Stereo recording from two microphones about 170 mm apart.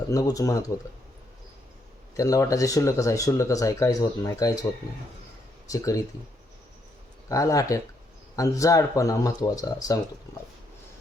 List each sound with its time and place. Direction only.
0.1 s speech: 20° left (ahead or behind)
2.1 s speech: 20° left (ahead or behind)
5.7 s speech: 20° left (ahead or behind)
7.3 s speech: 20° left (ahead or behind)